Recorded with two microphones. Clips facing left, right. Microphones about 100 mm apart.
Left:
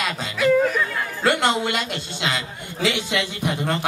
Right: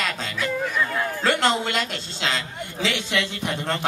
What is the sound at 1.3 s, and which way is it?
A man's voice, 10° left (ahead or behind).